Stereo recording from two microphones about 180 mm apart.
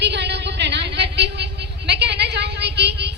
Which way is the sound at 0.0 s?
70° right (ahead or behind).